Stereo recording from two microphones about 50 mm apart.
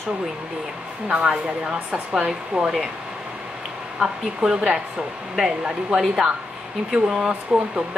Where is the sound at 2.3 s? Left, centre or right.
Centre.